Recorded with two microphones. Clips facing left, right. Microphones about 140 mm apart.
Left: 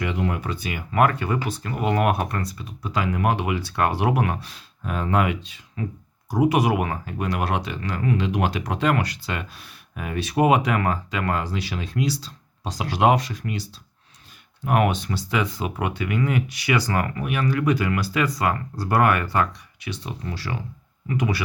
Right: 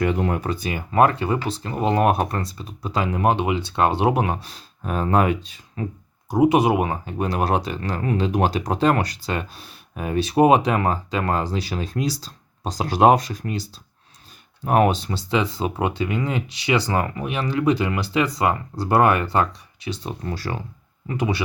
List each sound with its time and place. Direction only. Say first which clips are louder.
0.0 s speech: right 4 dB; 45° right (ahead or behind)
6.3 s speech: right 3 dB; 25° right (ahead or behind); by 20.6 s 45° right (ahead or behind)
21.1 s speech: right 1 dB; 25° right (ahead or behind)